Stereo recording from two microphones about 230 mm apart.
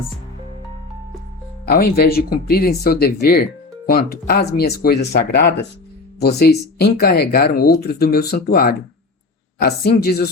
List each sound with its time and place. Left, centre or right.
1.6 s speech: left